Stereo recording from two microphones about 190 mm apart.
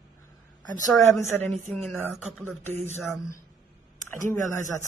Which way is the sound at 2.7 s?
35° right (ahead or behind).